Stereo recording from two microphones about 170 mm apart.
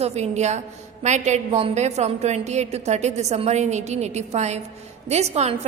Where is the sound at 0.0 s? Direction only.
40° right (ahead or behind).